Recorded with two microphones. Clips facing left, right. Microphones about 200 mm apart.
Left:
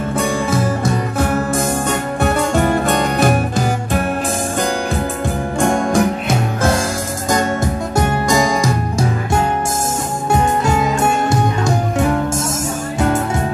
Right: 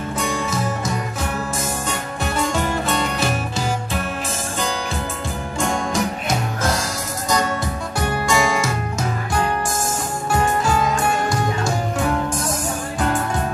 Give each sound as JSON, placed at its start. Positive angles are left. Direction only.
{"t": 0.2, "sound": "music", "side_deg": 55}
{"t": 5.6, "sound": "music", "side_deg": 55}
{"t": 7.2, "sound": "music", "side_deg": 50}
{"t": 11.0, "sound": "music", "side_deg": 25}